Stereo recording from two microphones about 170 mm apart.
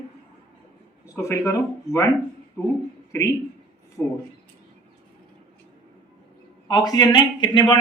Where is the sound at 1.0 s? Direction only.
15° left (ahead or behind).